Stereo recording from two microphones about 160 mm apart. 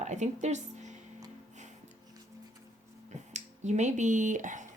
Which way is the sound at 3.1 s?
45° right (ahead or behind).